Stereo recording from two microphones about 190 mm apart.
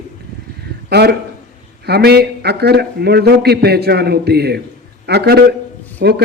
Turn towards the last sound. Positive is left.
turn(degrees=-55)  # may be behind; listen again after turning